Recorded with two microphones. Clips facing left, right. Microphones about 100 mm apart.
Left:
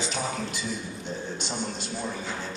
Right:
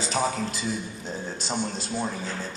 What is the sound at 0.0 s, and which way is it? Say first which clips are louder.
A man's voice: right 4 dB; 35° right (ahead or behind).